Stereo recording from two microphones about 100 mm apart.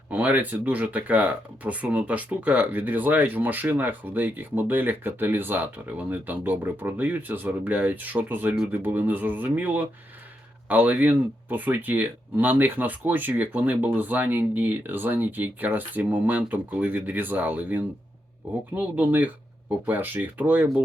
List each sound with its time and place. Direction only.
0.1 s speech: 15° right (ahead or behind)